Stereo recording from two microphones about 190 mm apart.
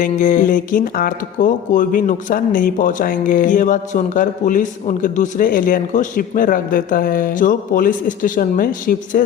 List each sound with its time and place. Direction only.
0.0 s speech: 40° left (ahead or behind)